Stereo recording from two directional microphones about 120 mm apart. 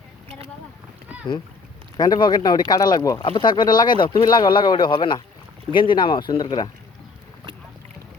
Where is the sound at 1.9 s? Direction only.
35° left (ahead or behind).